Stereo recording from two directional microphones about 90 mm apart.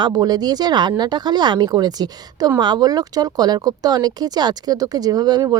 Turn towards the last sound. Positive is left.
turn(degrees=-50)  # may be behind; listen again after turning